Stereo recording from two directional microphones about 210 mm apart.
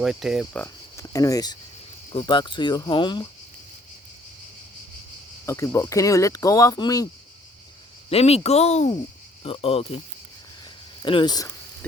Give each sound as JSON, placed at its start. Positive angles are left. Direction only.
{"t": 0.0, "sound": "cricket", "side_deg": 0}
{"t": 0.6, "sound": "speech", "side_deg": 15}
{"t": 5.5, "sound": "speech", "side_deg": 15}
{"t": 8.1, "sound": "speech", "side_deg": 30}
{"t": 11.0, "sound": "cricket", "side_deg": 25}